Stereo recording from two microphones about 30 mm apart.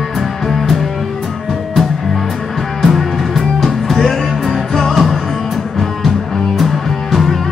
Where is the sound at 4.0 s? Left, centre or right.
Centre.